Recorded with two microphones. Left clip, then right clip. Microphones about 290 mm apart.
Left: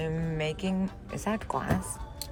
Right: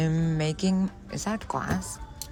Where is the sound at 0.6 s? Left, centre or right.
Centre.